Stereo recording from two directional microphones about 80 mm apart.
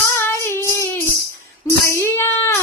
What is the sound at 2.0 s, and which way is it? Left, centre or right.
Child singing, left.